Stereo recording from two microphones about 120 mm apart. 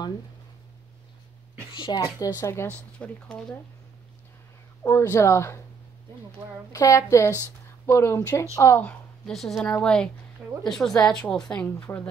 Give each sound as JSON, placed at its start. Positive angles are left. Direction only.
{"t": 1.8, "sound": "a woman's voice", "side_deg": 35}
{"t": 4.8, "sound": "speech", "side_deg": 25}
{"t": 6.7, "sound": "speech", "side_deg": 25}
{"t": 7.2, "sound": "speech", "side_deg": -20}
{"t": 7.8, "sound": "speech", "side_deg": 20}
{"t": 9.2, "sound": "a woman's voice", "side_deg": 5}